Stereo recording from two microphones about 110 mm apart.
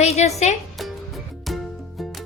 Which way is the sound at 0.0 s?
90° left.